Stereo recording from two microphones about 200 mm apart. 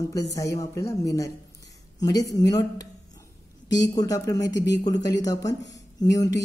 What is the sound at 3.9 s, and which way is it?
Speech, 15° left (ahead or behind).